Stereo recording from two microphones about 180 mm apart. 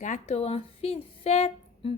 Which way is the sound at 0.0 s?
40° left (ahead or behind).